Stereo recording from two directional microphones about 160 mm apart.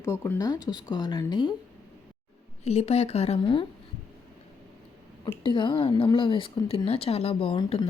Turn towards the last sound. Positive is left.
turn(degrees=30)  # may be behind; listen again after turning